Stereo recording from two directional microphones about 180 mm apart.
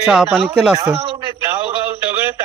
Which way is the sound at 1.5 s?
10° right (ahead or behind).